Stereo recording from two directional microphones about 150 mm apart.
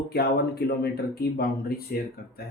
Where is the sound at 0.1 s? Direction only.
90° left.